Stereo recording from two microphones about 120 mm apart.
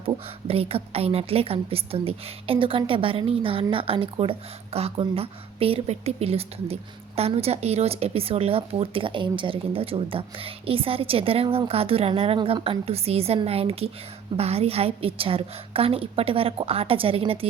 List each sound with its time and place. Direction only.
0.0 s a woman's voice: 55° right (ahead or behind)
12.5 s a woman's voice: 40° right (ahead or behind)
12.8 s a woman's voice: 55° right (ahead or behind)